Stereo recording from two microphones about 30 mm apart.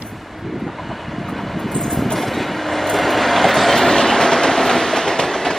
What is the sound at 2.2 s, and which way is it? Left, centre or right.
Train, centre.